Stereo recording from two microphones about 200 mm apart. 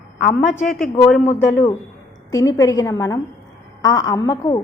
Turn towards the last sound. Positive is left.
turn(degrees=20)  # may be behind; listen again after turning